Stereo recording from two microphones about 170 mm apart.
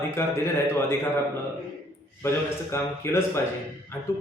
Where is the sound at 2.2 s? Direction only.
15° left (ahead or behind).